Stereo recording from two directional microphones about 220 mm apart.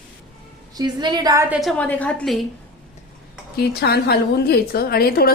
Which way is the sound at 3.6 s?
45° left (ahead or behind).